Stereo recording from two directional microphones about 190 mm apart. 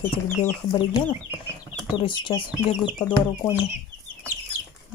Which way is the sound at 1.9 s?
25° left (ahead or behind).